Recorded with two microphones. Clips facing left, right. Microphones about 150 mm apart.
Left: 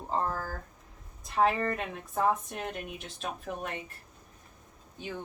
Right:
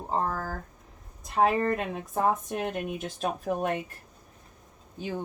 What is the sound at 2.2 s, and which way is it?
A woman's voice, 45° right (ahead or behind).